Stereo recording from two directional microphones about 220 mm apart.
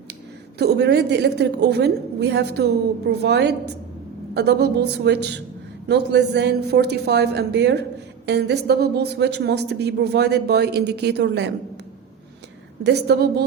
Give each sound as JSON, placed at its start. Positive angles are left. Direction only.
{"t": 0.6, "sound": "speech", "side_deg": -50}
{"t": 12.8, "sound": "speech", "side_deg": -50}